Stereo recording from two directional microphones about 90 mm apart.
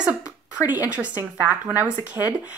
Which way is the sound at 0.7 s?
15° right (ahead or behind).